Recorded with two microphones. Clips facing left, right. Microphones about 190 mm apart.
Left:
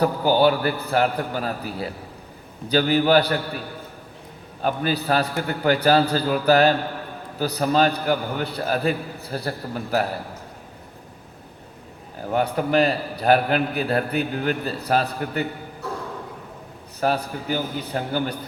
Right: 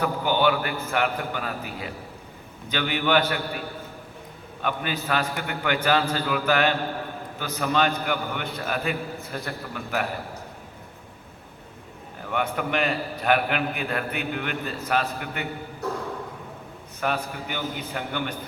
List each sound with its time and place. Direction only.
0.0 s a man's voice: 35° left (ahead or behind)
4.6 s a man's voice: 35° left (ahead or behind)
12.2 s a man's voice: 35° left (ahead or behind)
17.0 s a man's voice: 35° left (ahead or behind)